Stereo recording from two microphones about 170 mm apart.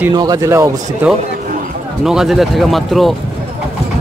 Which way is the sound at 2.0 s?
Centre (ahead or behind).